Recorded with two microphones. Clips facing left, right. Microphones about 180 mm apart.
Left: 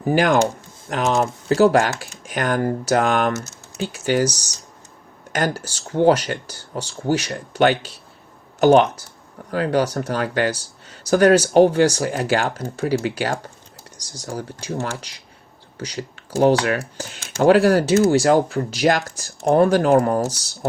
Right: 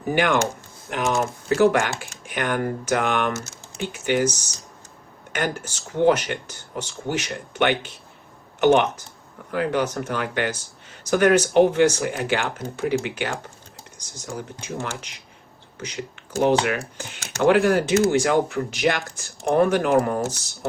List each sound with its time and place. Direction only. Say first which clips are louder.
0.0 s speech: left 4 dB; 35° left (ahead or behind)